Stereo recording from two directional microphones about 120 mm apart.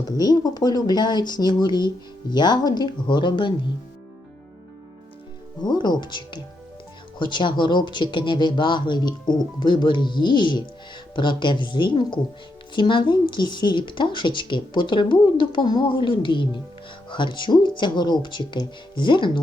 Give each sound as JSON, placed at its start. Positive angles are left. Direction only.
{"t": 0.0, "sound": "speech", "side_deg": 35}
{"t": 5.6, "sound": "a woman's voice", "side_deg": 35}